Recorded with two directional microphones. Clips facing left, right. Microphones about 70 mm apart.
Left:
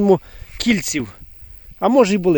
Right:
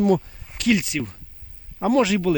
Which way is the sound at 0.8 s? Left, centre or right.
Left.